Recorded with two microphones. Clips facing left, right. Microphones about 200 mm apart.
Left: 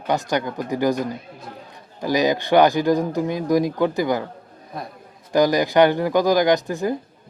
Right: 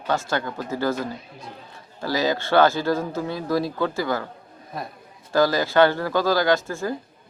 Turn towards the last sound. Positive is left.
turn(degrees=15)  # may be behind; listen again after turning